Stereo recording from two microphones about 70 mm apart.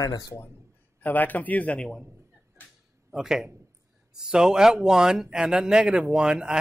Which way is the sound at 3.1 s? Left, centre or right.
Centre.